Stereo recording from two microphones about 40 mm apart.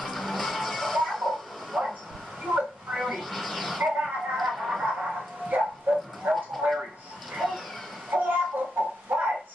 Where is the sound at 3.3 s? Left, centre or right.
Centre.